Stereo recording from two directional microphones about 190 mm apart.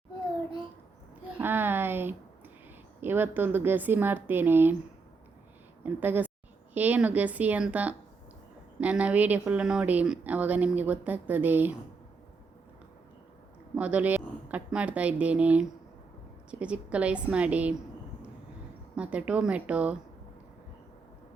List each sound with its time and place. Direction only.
1.4 s a sound: 10° right (ahead or behind)
3.0 s a woman's voice: 10° right (ahead or behind)
5.8 s a woman's voice: 10° right (ahead or behind)
13.7 s a woman's voice: 5° right (ahead or behind)
18.9 s a woman's voice: 5° right (ahead or behind)